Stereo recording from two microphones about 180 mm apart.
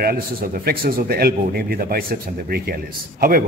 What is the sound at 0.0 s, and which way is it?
A man's voice, 55° right (ahead or behind).